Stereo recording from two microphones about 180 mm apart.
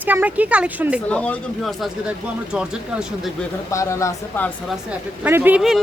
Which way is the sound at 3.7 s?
15° left (ahead or behind).